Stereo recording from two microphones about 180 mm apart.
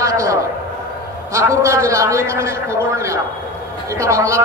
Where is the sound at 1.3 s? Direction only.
15° right (ahead or behind).